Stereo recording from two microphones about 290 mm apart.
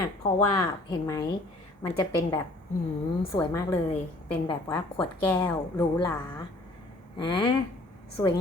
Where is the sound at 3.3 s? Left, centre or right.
Centre.